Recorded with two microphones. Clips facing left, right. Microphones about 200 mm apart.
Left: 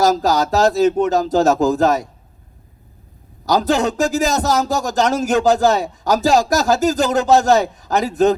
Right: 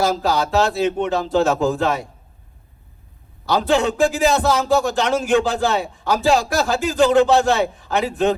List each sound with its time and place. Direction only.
0.0 s a man's voice: 40° left (ahead or behind)
3.4 s a man's voice: 40° left (ahead or behind)